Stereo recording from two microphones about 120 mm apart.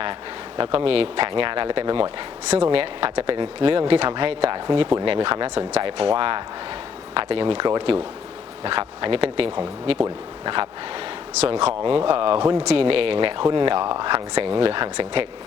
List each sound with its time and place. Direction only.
0.0 s speech: 45° right (ahead or behind)
11.3 s speech: 55° right (ahead or behind)